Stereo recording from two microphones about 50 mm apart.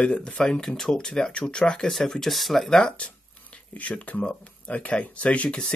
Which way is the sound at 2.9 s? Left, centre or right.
Left.